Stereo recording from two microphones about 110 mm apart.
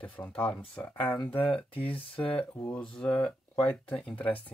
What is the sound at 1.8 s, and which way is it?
Speech, 55° left (ahead or behind).